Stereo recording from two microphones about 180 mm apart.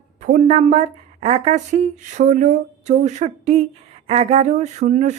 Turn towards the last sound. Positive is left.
turn(degrees=-40)  # may be behind; listen again after turning